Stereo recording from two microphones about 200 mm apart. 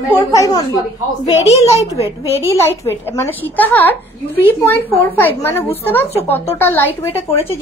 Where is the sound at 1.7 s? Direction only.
15° right (ahead or behind).